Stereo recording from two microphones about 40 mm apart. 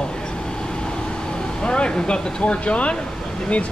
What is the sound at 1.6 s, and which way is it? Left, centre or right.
A man's voice, left.